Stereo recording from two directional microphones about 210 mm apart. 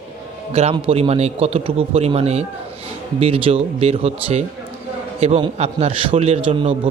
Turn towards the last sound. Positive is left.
turn(degrees=-25)  # may be behind; listen again after turning